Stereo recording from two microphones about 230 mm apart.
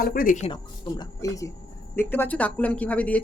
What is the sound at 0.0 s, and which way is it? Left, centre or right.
Speech, left.